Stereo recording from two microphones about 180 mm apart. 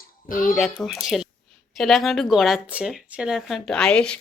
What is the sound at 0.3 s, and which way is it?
Speech, 50° left (ahead or behind).